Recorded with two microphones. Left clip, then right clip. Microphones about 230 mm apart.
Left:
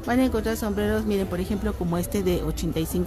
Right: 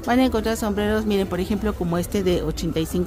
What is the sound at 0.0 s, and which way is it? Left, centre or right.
Speech, centre.